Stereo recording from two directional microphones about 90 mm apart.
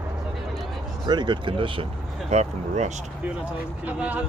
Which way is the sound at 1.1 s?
55° right (ahead or behind).